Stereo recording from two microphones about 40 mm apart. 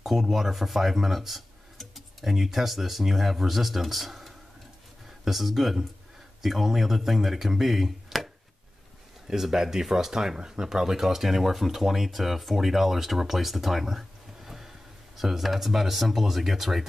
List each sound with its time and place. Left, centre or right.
0.0 s speech: centre
9.3 s speech: centre